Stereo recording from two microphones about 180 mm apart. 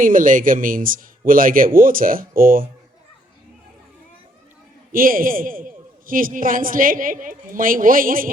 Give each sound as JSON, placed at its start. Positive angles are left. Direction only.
{"t": 0.0, "sound": "a woman's voice", "side_deg": -50}
{"t": 4.9, "sound": "a woman's voice", "side_deg": -50}